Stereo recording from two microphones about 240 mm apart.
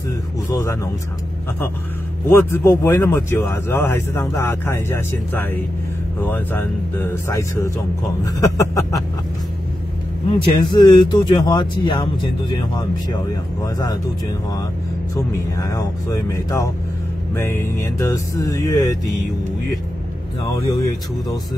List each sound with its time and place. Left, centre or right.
0.5 s speech: centre
2.2 s speech: centre
10.4 s speech: centre
15.5 s speech: centre
20.5 s speech: centre